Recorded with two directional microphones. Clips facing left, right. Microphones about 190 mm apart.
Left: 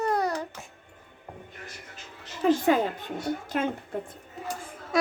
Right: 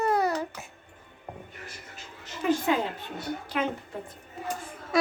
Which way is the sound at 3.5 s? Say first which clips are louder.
Left 1 dB; 45° left (ahead or behind).